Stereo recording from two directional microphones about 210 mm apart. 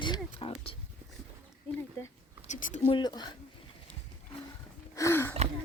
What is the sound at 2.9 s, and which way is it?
Speech, 20° left (ahead or behind).